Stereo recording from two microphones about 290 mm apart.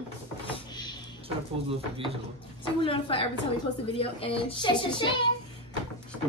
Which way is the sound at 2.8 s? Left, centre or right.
Centre.